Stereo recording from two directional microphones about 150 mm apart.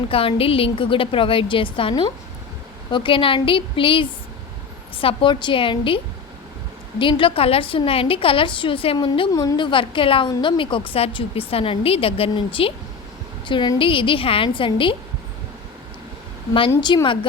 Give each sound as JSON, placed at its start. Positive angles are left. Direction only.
{"t": 0.1, "sound": "a woman's voice", "side_deg": 40}
{"t": 7.0, "sound": "a woman's voice", "side_deg": 35}
{"t": 9.3, "sound": "a woman's voice", "side_deg": 25}
{"t": 16.8, "sound": "a woman's voice", "side_deg": 30}